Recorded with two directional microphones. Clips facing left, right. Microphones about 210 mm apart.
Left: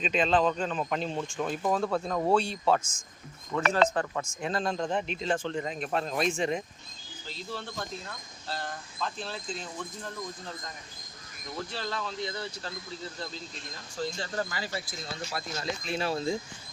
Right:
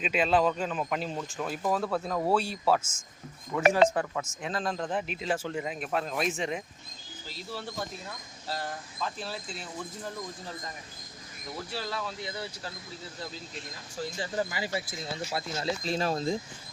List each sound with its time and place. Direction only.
0.0 s speech: 5° right (ahead or behind)
11.7 s speech: 10° right (ahead or behind)
14.0 s speech: 10° right (ahead or behind); by 16.1 s 40° right (ahead or behind)